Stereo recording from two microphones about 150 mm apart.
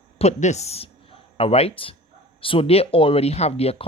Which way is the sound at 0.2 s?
50° left (ahead or behind).